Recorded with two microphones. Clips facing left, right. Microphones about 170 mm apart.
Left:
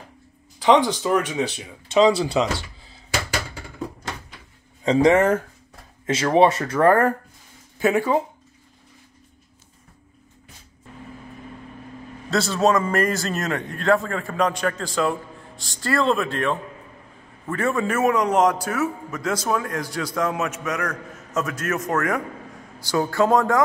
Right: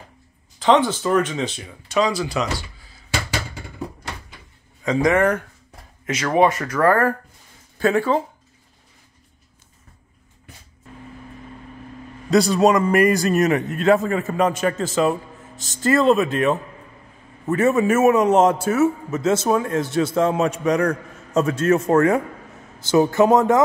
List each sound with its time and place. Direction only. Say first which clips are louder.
0.6 s speech: even; 15° left (ahead or behind)
1.9 s speech: left 4 dB; 25° left (ahead or behind)
4.8 s speech: left 1 dB; 30° left (ahead or behind); by 8.2 s 15° left (ahead or behind)
12.3 s a man's voice: right 4 dB; 15° right (ahead or behind)